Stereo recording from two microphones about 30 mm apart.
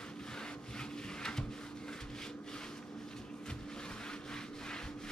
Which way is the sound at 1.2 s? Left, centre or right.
Left.